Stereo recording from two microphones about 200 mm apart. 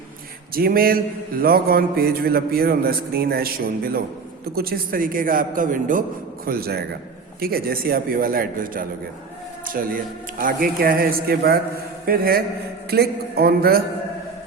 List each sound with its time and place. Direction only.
0.5 s mantra: 50° right (ahead or behind)